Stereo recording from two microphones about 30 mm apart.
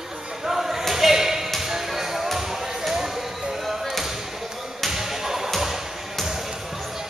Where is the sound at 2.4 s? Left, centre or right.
Centre.